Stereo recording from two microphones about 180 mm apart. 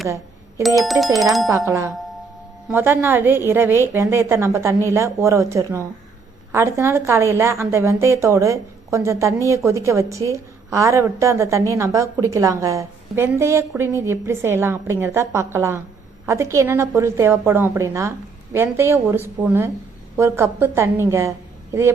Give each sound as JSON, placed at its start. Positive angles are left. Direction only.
{"t": 0.8, "sound": "speech", "side_deg": 0}
{"t": 1.5, "sound": "a woman's voice", "side_deg": -15}